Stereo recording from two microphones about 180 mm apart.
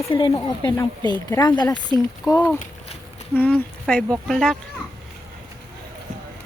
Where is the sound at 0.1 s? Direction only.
25° left (ahead or behind); by 4.5 s centre (ahead or behind).